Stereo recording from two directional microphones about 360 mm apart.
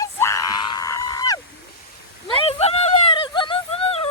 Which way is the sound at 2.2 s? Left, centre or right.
Centre.